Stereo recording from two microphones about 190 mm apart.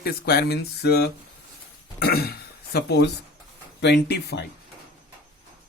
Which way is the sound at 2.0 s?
55° left (ahead or behind).